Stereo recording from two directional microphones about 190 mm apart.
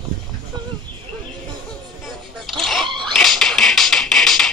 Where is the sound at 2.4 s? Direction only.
Centre (ahead or behind).